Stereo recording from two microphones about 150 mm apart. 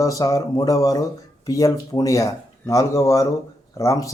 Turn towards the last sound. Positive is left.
turn(degrees=20)  # may be behind; listen again after turning